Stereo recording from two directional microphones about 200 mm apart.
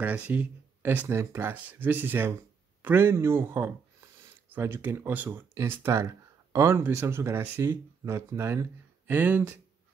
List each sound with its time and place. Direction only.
0.0 s speech: 5° right (ahead or behind)